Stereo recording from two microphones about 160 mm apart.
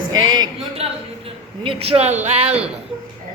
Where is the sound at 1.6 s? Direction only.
35° right (ahead or behind).